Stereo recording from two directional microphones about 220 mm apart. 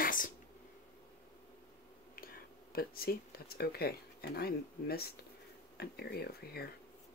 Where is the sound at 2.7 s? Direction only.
45° left (ahead or behind).